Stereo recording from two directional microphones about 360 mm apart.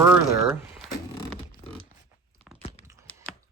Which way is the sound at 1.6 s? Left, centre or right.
Centre.